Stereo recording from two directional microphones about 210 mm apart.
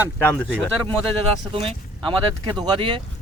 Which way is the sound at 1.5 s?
25° right (ahead or behind).